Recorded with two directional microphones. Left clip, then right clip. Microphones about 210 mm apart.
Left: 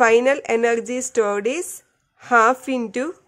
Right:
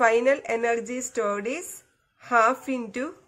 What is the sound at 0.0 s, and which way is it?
A woman's voice, 45° left (ahead or behind).